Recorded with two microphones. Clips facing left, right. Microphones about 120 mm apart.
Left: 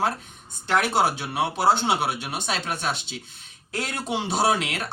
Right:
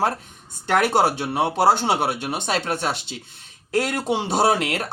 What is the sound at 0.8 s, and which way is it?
Speech, 55° right (ahead or behind).